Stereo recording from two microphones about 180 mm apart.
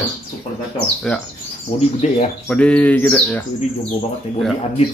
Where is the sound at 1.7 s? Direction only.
35° left (ahead or behind).